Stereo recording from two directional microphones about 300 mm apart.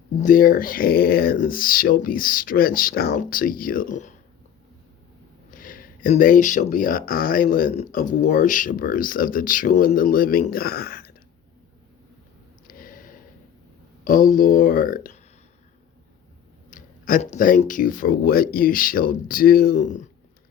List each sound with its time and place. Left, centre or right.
0.2 s speech: left
5.5 s speech: left
12.6 s gasp: left
14.0 s speech: left
16.6 s speech: left